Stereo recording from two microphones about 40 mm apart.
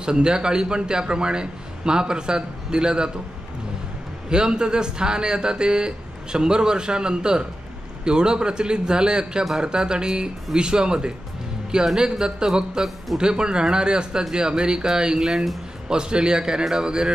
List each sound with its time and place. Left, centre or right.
0.0 s speech: right
4.3 s speech: right